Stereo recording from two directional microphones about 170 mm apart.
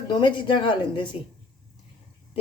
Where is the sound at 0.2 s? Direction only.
25° left (ahead or behind).